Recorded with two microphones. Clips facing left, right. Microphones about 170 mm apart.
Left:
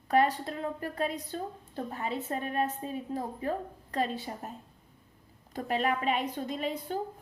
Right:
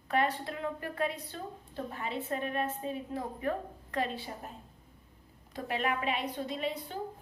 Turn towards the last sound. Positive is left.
turn(degrees=45)  # may be behind; listen again after turning